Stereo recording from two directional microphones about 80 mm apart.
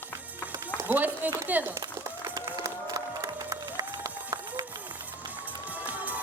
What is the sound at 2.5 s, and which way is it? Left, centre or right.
Music, right.